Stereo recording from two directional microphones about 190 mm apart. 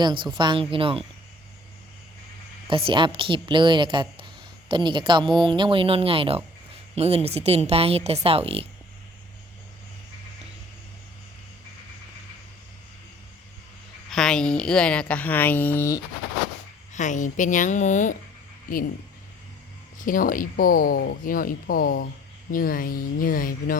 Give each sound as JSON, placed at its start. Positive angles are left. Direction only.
{"t": 0.0, "sound": "speech", "side_deg": -25}
{"t": 2.6, "sound": "speech", "side_deg": -25}
{"t": 14.1, "sound": "speech", "side_deg": 5}
{"t": 16.9, "sound": "a woman's voice", "side_deg": 40}
{"t": 20.0, "sound": "speech", "side_deg": 45}